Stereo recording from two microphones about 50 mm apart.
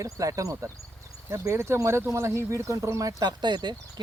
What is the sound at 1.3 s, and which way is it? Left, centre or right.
Speech, right.